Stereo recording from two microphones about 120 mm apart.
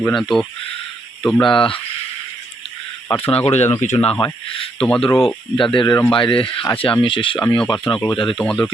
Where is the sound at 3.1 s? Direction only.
45° left (ahead or behind).